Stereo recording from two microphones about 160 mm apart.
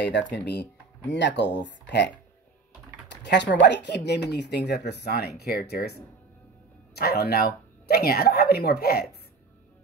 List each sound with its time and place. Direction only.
0.0 s speech: 90° left
3.1 s typing: 90° left
3.6 s speech: 90° left
7.0 s speech: 80° left